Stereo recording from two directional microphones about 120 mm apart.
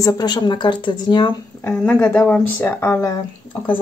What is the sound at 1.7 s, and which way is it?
Speech, 10° left (ahead or behind).